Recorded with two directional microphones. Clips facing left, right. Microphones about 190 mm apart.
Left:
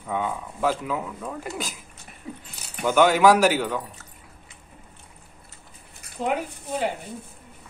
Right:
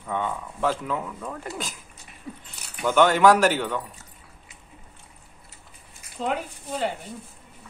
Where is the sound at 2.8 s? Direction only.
5° left (ahead or behind).